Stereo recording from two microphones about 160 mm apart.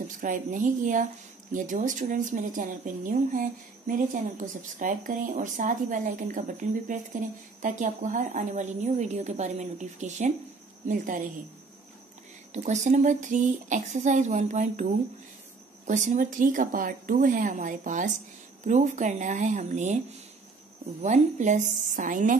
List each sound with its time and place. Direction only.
0.2 s a woman's voice: 55° right (ahead or behind)
12.5 s speech: 45° right (ahead or behind)